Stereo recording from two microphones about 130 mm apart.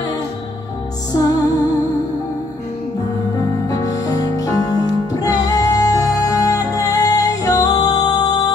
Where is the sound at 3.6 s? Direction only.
30° left (ahead or behind).